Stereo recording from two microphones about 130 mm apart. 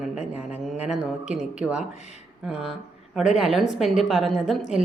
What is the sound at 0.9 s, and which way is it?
Speech, 5° right (ahead or behind).